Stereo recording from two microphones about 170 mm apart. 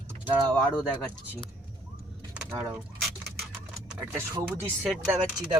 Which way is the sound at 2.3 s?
10° right (ahead or behind).